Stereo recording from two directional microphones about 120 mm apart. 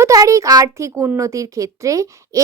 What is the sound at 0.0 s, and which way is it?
A woman's voice, 30° right (ahead or behind).